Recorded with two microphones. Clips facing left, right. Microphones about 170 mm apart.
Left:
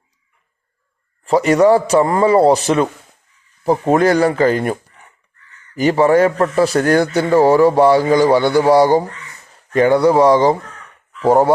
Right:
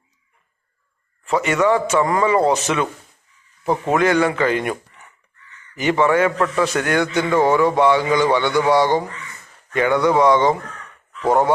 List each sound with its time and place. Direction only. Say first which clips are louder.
1.2 s a man's voice: left 6 dB; 35° left (ahead or behind)